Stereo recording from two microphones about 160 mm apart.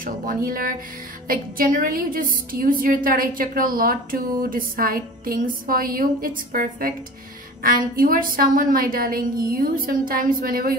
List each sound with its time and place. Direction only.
0.5 s a woman's voice: 65° right (ahead or behind)